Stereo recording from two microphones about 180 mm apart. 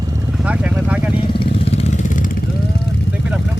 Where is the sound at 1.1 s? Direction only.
30° left (ahead or behind); by 2.3 s 45° left (ahead or behind).